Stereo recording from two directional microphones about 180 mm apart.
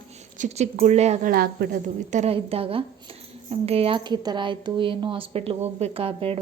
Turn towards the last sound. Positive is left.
turn(degrees=-30)  # may be behind; listen again after turning